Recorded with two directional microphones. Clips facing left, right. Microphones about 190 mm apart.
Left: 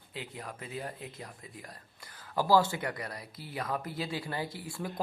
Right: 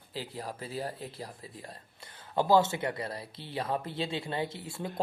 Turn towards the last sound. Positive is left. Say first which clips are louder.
# right 2 dB
turn(degrees=-25)  # may be behind; listen again after turning